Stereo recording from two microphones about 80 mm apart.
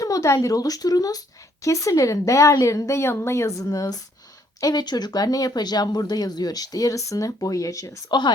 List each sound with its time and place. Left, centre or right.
0.0 s speech: left
4.6 s speech: left